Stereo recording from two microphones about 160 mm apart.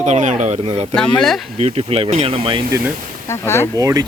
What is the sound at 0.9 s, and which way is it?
Speech, 5° left (ahead or behind).